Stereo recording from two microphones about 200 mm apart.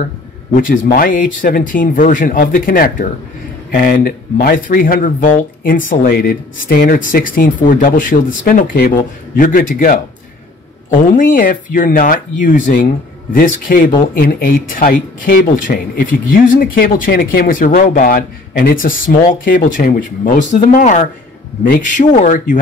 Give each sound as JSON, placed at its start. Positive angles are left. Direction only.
{"t": 0.6, "sound": "speech", "side_deg": 45}
{"t": 11.3, "sound": "speech", "side_deg": 45}